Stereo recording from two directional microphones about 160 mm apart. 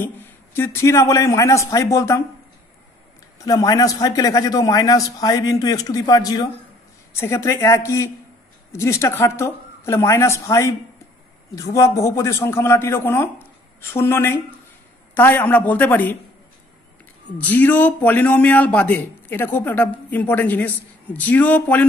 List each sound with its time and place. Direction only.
0.0 s a man's voice: 15° left (ahead or behind)
3.3 s a man's voice: 25° left (ahead or behind)
17.4 s a man's voice: 10° left (ahead or behind)